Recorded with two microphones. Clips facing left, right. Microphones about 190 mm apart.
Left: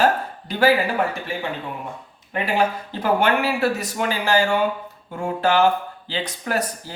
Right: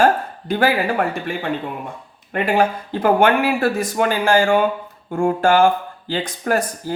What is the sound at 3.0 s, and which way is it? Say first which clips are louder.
Speech: right 4 dB; 50° right (ahead or behind).